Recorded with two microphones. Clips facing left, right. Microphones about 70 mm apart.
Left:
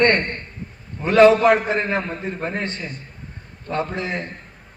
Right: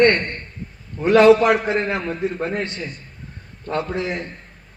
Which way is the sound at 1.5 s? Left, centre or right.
Left.